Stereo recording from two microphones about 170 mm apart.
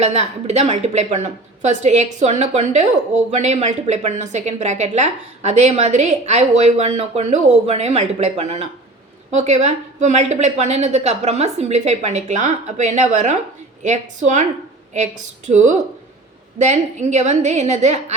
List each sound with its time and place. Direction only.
0.0 s a woman's voice: 40° right (ahead or behind)